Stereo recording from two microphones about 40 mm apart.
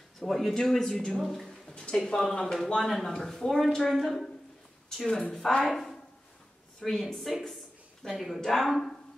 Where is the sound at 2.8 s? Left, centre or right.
Centre.